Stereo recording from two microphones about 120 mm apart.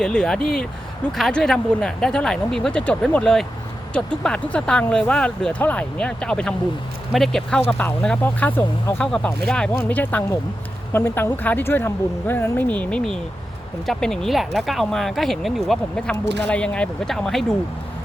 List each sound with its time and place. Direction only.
0.0 s speech: 5° left (ahead or behind)
9.0 s speech: 5° left (ahead or behind)